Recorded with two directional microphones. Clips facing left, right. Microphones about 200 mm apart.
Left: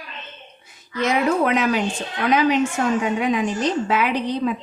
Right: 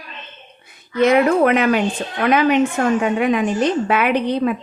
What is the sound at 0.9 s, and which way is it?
A woman's voice, 60° right (ahead or behind).